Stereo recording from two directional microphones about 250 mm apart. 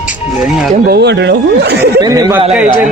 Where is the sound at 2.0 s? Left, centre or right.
Centre.